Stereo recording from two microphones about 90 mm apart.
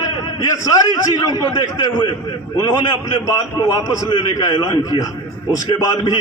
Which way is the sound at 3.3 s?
40° left (ahead or behind).